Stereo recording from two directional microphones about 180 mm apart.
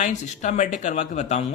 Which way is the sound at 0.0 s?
40° left (ahead or behind).